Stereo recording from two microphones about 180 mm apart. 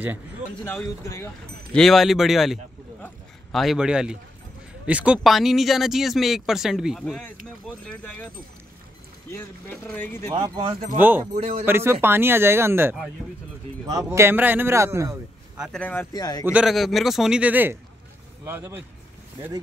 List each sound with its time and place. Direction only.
0.7 s speech: 15° left (ahead or behind)
1.7 s speech: centre (ahead or behind)
9.9 s speech: 10° left (ahead or behind)
10.4 s speech: 25° right (ahead or behind)
11.0 s speech: 10° right (ahead or behind)
11.3 s speech: 35° right (ahead or behind)
11.6 s speech: 15° right (ahead or behind)
14.1 s speech: 10° right (ahead or behind)
15.6 s speech: 5° left (ahead or behind); by 16.5 s 20° left (ahead or behind)
16.5 s speech: centre (ahead or behind)